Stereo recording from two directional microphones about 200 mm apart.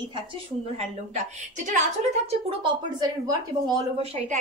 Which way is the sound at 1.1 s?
35° right (ahead or behind).